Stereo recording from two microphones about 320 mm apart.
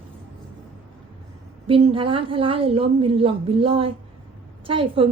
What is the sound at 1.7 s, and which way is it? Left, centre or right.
A woman's voice, centre.